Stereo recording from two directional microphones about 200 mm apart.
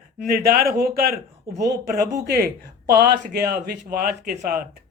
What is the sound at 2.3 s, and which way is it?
Speech, 50° right (ahead or behind).